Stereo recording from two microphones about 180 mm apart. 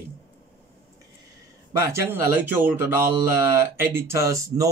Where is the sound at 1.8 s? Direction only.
15° right (ahead or behind).